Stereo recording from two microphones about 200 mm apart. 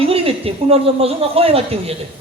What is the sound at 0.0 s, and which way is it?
A woman's voice, 30° right (ahead or behind).